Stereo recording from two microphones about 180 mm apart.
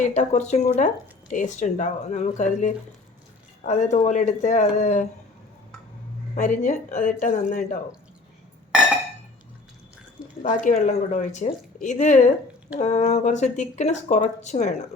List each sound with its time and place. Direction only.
0.0 s a woman's voice: 40° left (ahead or behind)
6.3 s a woman's voice: 45° left (ahead or behind)
10.4 s a woman's voice: 45° left (ahead or behind)